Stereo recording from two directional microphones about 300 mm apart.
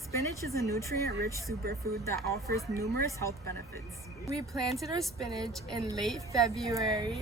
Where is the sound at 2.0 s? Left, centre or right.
Centre.